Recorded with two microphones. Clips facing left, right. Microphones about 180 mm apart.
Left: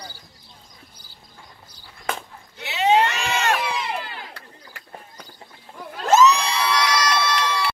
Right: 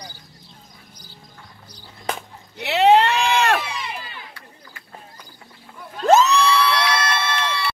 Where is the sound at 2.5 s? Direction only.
65° right (ahead or behind).